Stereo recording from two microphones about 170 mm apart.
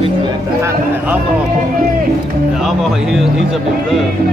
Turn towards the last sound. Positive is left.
turn(degrees=-5)  # may be behind; listen again after turning